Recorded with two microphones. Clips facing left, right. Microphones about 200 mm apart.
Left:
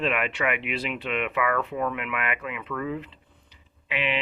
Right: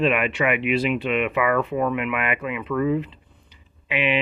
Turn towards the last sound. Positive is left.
turn(degrees=-15)  # may be behind; listen again after turning